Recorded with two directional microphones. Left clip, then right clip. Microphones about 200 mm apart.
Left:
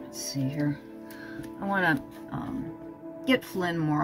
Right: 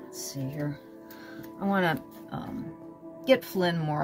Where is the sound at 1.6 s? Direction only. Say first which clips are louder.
Left 1 dB; 30° right (ahead or behind).